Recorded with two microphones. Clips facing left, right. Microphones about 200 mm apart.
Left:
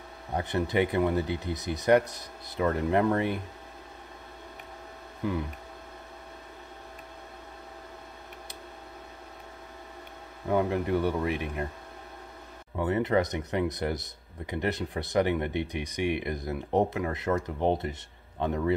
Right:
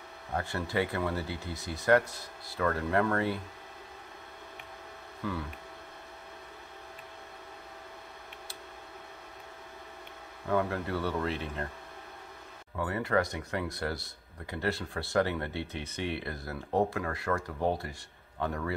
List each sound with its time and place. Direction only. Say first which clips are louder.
0.3 s speech: left 5 dB; 20° left (ahead or behind)
5.2 s speech: left 5 dB; 15° left (ahead or behind)
10.5 s speech: left 4 dB; 20° left (ahead or behind)
12.7 s speech: left 4 dB; 20° left (ahead or behind)